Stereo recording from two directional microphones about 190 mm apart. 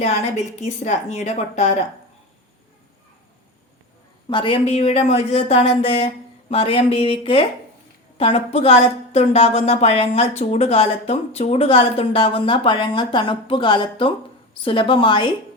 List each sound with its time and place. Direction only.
0.0 s a woman's voice: 35° left (ahead or behind)
4.3 s a woman's voice: 25° left (ahead or behind)